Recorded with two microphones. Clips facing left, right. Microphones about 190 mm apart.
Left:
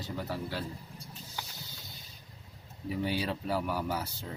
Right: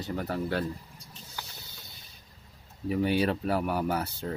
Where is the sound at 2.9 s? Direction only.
60° right (ahead or behind).